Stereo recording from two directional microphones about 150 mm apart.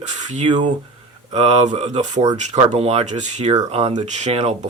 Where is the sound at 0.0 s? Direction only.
50° right (ahead or behind).